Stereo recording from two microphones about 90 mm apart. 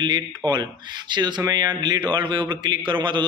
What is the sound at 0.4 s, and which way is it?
Speech, 55° right (ahead or behind).